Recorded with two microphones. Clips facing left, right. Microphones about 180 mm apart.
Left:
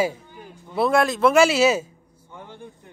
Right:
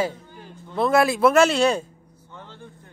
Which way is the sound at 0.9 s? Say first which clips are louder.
Right 1 dB; 5° right (ahead or behind).